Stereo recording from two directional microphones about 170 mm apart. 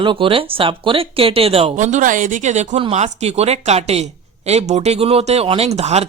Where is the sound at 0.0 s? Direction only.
30° right (ahead or behind).